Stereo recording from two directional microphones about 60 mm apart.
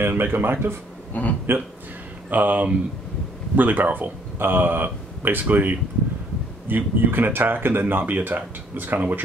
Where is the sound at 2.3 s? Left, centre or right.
Right.